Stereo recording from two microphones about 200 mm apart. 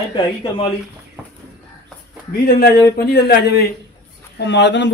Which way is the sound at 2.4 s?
50° left (ahead or behind).